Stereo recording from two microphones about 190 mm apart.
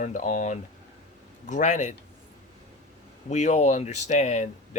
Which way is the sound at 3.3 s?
35° left (ahead or behind).